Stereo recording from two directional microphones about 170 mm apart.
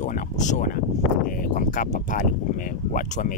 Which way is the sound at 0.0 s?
45° left (ahead or behind).